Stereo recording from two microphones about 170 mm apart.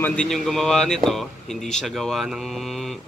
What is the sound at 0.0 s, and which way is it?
Speech, 5° left (ahead or behind).